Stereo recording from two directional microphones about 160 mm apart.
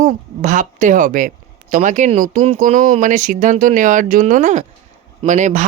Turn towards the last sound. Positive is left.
turn(degrees=-50)  # may be behind; listen again after turning